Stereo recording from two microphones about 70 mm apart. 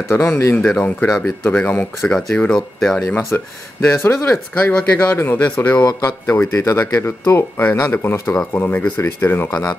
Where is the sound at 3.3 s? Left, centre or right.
Left.